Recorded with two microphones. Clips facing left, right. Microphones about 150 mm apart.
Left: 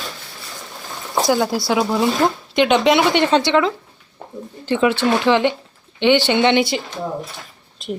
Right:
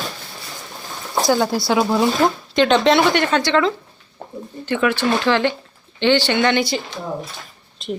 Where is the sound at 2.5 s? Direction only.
15° left (ahead or behind).